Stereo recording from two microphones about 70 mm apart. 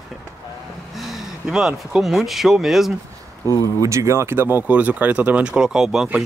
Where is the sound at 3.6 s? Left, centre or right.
Right.